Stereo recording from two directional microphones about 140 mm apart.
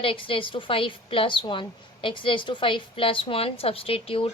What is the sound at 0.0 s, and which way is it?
A woman's voice, 40° left (ahead or behind).